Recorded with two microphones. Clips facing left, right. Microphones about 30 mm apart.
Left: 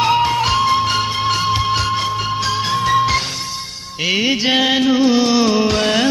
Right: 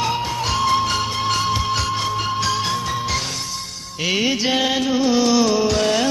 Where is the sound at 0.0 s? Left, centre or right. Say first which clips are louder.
Left 7 dB; left.